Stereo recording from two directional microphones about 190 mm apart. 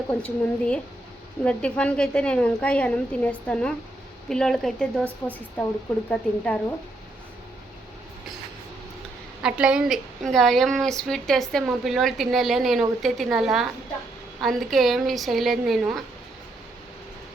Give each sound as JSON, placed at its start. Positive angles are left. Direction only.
{"t": 0.1, "sound": "a woman's voice", "side_deg": 5}
{"t": 6.1, "sound": "speech", "side_deg": 5}
{"t": 9.4, "sound": "a woman's voice", "side_deg": -5}